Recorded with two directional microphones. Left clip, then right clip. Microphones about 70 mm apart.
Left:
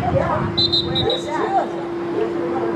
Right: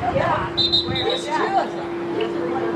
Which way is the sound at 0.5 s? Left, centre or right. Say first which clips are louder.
Left 2 dB; centre.